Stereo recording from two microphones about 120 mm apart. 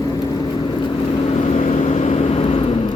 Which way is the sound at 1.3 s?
60° left (ahead or behind).